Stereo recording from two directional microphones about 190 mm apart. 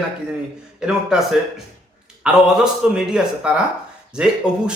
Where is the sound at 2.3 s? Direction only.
5° right (ahead or behind).